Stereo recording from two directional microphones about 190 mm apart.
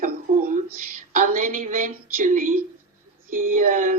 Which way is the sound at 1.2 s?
45° right (ahead or behind).